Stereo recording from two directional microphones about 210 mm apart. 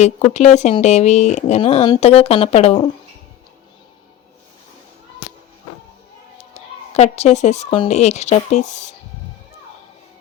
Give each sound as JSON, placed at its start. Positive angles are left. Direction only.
{"t": 0.0, "sound": "speech", "side_deg": 30}
{"t": 6.5, "sound": "a woman's voice", "side_deg": 30}